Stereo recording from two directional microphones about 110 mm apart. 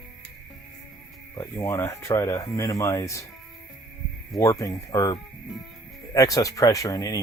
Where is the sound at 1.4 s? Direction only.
25° left (ahead or behind).